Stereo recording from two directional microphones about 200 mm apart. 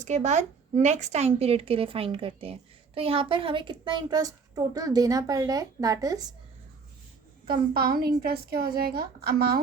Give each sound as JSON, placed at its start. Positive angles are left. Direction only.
{"t": 0.0, "sound": "speech", "side_deg": -35}
{"t": 7.7, "sound": "a woman's voice", "side_deg": -50}